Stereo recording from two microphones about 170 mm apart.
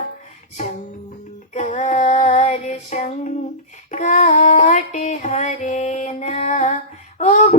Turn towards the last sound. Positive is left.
turn(degrees=40)  # may be behind; listen again after turning